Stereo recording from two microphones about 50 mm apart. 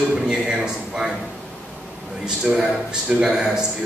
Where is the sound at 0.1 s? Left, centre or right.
Centre.